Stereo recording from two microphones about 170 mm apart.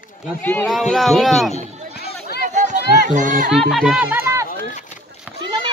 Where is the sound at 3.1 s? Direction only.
50° right (ahead or behind).